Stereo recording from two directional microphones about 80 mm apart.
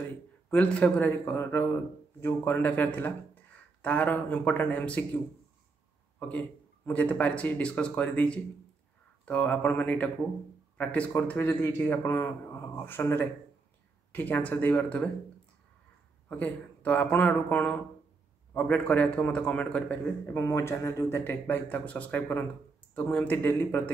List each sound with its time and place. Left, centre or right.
0.5 s speech: centre
1.3 s a man's voice: left
16.3 s a man's voice: centre
20.2 s speech: left
21.2 s a man's voice: left